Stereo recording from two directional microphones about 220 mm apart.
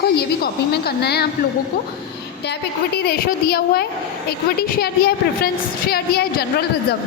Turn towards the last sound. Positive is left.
turn(degrees=45)  # may be behind; listen again after turning